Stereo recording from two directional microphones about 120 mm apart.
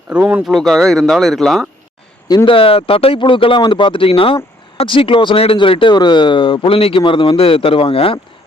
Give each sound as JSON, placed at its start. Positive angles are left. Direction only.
{"t": 0.1, "sound": "speech", "side_deg": -10}
{"t": 0.4, "sound": "speech", "side_deg": 0}
{"t": 2.2, "sound": "speech", "side_deg": 35}